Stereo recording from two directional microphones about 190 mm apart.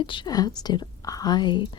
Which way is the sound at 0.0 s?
25° left (ahead or behind).